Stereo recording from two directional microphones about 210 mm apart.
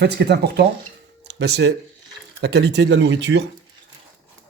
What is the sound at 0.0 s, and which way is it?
Speech, 55° right (ahead or behind).